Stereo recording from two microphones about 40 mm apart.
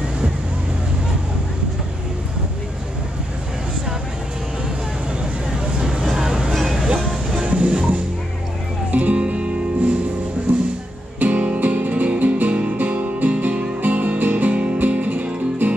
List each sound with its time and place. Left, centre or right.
5.8 s vehicle: centre
6.5 s music: centre
7.4 s music: right
8.9 s music: right
10.5 s music: right
13.4 s guitar: right